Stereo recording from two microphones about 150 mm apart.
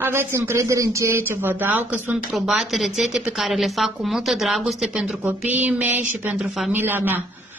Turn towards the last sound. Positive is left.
turn(degrees=-10)  # may be behind; listen again after turning